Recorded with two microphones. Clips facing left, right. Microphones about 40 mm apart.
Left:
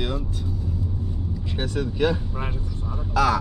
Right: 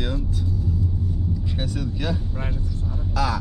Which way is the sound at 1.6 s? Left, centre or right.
Left.